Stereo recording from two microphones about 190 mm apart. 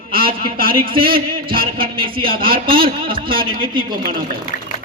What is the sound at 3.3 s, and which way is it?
Speech, 25° right (ahead or behind).